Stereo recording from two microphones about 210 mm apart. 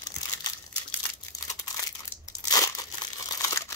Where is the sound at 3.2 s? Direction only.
15° left (ahead or behind).